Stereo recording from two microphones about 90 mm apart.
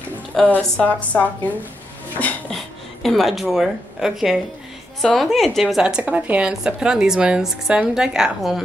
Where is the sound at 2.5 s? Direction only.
Centre (ahead or behind).